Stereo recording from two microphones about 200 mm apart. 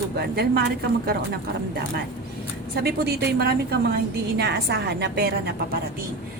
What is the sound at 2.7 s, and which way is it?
A woman's voice, 50° right (ahead or behind).